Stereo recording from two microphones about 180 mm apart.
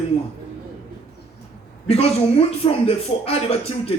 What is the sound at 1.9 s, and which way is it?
A man's voice, 35° left (ahead or behind).